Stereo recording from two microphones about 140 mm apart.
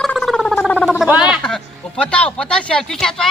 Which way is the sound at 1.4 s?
5° left (ahead or behind).